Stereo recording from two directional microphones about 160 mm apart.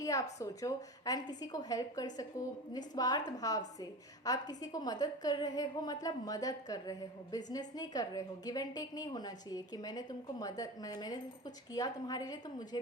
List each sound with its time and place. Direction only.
0.0 s a woman's voice: 20° left (ahead or behind)